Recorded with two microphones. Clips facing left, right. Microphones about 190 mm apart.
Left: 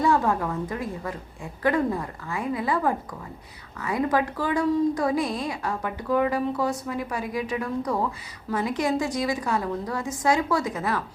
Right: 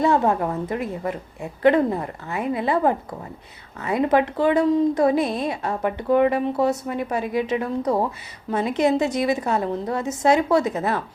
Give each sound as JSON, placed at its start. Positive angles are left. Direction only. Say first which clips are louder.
{"t": 0.0, "sound": "a woman's voice", "louder": "right 3 dB", "side_deg": -25}